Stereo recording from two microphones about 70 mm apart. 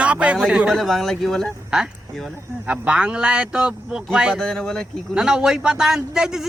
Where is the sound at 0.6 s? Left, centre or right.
Centre.